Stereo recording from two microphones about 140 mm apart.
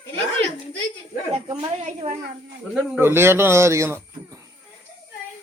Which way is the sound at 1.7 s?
50° right (ahead or behind).